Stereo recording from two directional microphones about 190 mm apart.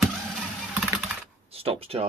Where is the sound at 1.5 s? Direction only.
30° right (ahead or behind).